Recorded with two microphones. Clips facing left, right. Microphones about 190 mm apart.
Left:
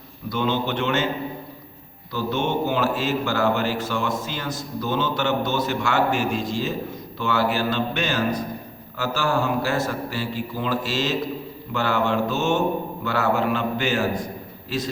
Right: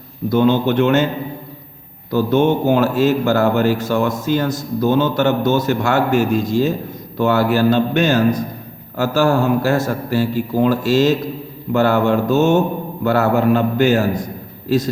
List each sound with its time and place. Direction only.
0.3 s a man's voice: 45° right (ahead or behind)
2.0 s a man's voice: 45° right (ahead or behind)